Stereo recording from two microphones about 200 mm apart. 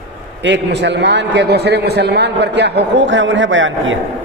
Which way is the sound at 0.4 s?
60° right (ahead or behind).